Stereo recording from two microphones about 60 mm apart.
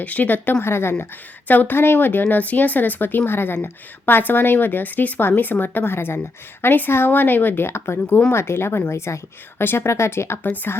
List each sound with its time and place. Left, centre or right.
0.0 s speech: left
0.6 s a woman's voice: left
1.5 s a woman's voice: left
10.4 s speech: left